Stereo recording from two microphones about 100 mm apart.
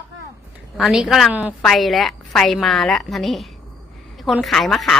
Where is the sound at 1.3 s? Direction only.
15° right (ahead or behind).